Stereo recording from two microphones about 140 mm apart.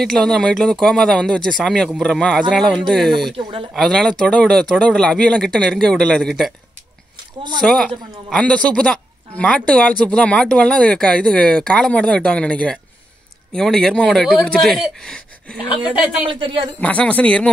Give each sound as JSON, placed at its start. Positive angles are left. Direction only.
{"t": 0.0, "sound": "speech", "side_deg": 5}
{"t": 3.3, "sound": "speech", "side_deg": -40}
{"t": 3.7, "sound": "speech", "side_deg": 0}
{"t": 7.6, "sound": "speech", "side_deg": 5}
{"t": 16.3, "sound": "speech", "side_deg": -40}
{"t": 16.8, "sound": "speech", "side_deg": 10}